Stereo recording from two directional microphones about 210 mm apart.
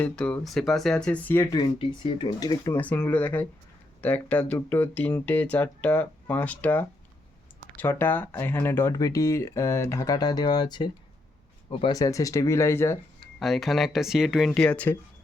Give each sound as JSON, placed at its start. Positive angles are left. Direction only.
{"t": 0.0, "sound": "speech", "side_deg": 5}
{"t": 1.5, "sound": "speech", "side_deg": 25}
{"t": 13.4, "sound": "speech", "side_deg": 0}